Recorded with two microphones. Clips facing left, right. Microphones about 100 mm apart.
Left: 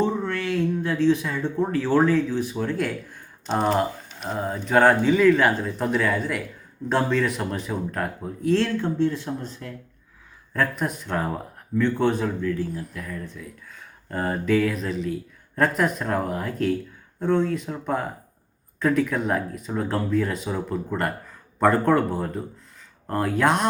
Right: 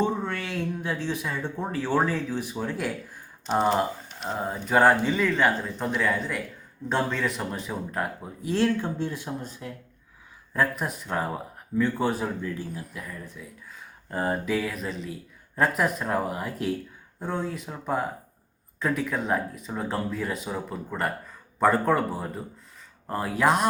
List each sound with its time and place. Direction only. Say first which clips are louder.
0.0 s a sound: left 2 dB; 15° right (ahead or behind)
0.4 s speech: left 6 dB; 5° right (ahead or behind)
12.4 s speech: left 7 dB; 20° right (ahead or behind)
12.7 s speech: left 4 dB; 5° right (ahead or behind)